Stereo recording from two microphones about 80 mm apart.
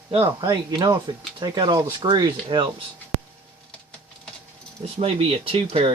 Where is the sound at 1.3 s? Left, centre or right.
Right.